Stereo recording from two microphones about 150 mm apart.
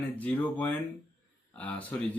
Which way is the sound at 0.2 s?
10° left (ahead or behind).